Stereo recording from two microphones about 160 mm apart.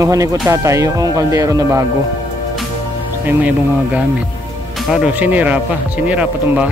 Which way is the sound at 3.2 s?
10° right (ahead or behind).